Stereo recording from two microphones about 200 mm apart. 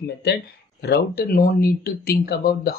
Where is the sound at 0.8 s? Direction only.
55° left (ahead or behind).